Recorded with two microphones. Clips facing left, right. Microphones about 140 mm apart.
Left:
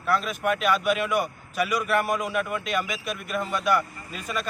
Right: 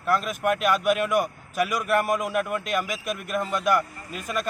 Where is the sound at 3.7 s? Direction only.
Centre (ahead or behind).